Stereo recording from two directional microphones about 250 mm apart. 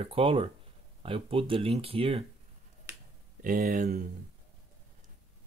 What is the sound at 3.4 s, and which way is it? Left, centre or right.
Speech, right.